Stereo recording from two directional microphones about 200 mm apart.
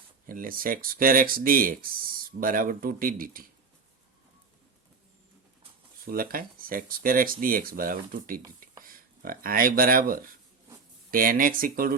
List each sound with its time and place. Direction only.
0.3 s speech: 45° right (ahead or behind)
6.1 s speech: 45° right (ahead or behind)